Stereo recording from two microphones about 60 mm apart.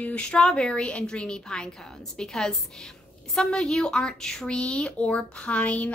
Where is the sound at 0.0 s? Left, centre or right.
Centre.